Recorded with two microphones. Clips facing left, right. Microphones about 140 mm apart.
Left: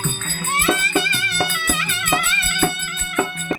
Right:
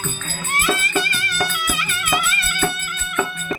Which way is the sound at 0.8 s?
25° left (ahead or behind).